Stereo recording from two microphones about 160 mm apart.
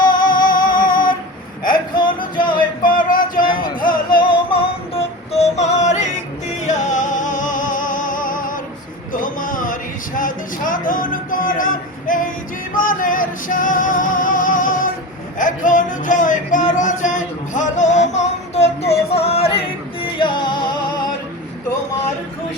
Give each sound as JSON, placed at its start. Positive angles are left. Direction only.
{"t": 0.2, "sound": "music", "side_deg": 60}
{"t": 1.7, "sound": "music", "side_deg": 30}
{"t": 2.8, "sound": "music", "side_deg": 60}
{"t": 3.4, "sound": "music", "side_deg": 30}
{"t": 3.8, "sound": "music", "side_deg": 60}
{"t": 4.2, "sound": "music", "side_deg": 30}
{"t": 9.1, "sound": "a sound", "side_deg": 55}
{"t": 10.2, "sound": "music", "side_deg": 60}